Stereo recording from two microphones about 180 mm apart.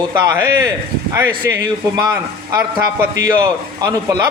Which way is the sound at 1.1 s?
15° right (ahead or behind).